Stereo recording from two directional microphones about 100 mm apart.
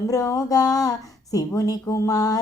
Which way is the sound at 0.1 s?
35° left (ahead or behind).